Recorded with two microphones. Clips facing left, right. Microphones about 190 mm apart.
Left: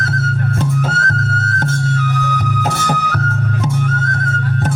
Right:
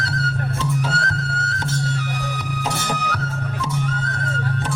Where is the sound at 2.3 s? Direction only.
50° left (ahead or behind).